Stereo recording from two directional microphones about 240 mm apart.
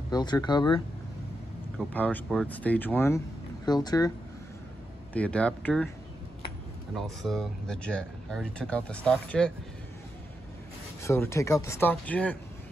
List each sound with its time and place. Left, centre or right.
0.1 s speech: centre
1.8 s speech: centre
5.1 s speech: centre
7.0 s speech: centre
11.0 s speech: centre